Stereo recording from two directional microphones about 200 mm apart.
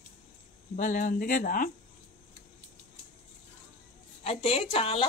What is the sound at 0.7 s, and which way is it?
Speech, 40° left (ahead or behind).